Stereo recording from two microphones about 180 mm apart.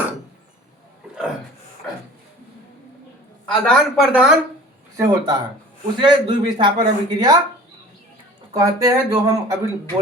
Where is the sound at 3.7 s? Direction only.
Centre (ahead or behind).